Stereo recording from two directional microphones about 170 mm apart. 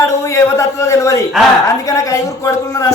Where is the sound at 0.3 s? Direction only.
15° left (ahead or behind).